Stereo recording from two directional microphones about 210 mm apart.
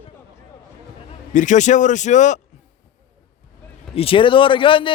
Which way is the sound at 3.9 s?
25° left (ahead or behind).